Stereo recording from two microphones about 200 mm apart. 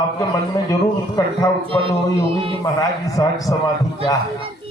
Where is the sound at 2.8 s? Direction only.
15° left (ahead or behind).